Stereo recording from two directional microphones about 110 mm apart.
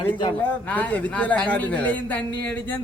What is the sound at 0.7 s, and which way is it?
A man's voice, 15° left (ahead or behind).